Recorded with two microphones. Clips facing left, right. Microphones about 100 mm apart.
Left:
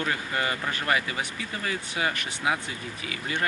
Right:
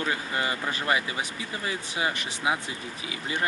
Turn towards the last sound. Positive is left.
turn(degrees=-25)  # may be behind; listen again after turning